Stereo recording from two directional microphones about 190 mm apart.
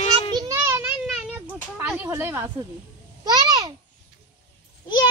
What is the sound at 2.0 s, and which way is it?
Speech, 15° right (ahead or behind).